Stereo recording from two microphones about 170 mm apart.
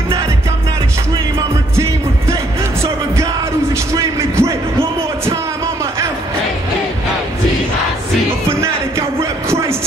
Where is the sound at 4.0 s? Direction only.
20° right (ahead or behind).